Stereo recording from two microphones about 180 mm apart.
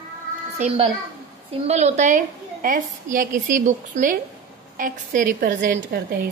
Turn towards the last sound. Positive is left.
turn(degrees=-50)  # may be behind; listen again after turning